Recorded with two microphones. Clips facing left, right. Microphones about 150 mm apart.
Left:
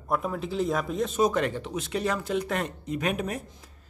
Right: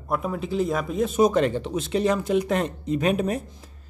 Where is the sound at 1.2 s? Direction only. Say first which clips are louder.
Right 5 dB; 25° right (ahead or behind).